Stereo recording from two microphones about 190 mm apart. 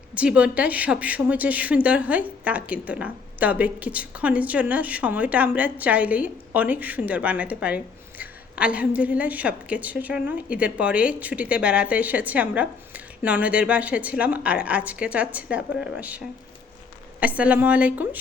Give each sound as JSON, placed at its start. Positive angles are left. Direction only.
{"t": 0.2, "sound": "a woman's voice", "side_deg": -5}